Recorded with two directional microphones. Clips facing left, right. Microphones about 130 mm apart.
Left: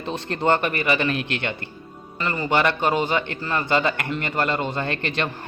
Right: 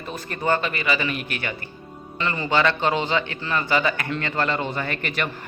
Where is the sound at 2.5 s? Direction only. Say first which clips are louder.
Even; 15° left (ahead or behind).